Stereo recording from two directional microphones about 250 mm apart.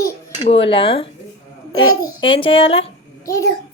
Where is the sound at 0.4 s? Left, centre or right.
Left.